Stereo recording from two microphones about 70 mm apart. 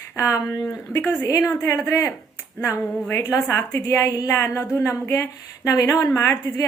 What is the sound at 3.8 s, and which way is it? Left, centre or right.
Speech, left.